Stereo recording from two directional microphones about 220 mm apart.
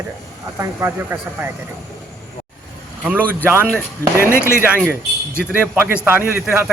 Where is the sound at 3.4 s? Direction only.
10° right (ahead or behind).